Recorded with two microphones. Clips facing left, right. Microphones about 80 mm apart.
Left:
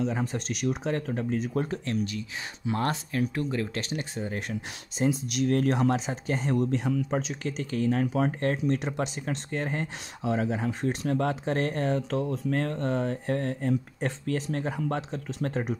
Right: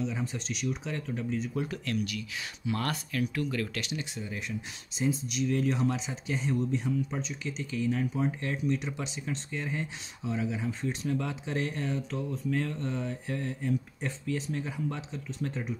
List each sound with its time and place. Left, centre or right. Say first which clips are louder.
0.0 s speech: left 5 dB; left
1.7 s speech: left 3 dB; left
6.5 s speech: left 4 dB; left
7.5 s speech: left 4 dB; left